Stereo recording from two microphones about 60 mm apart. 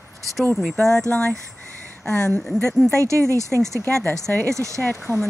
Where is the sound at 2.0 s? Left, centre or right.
Centre.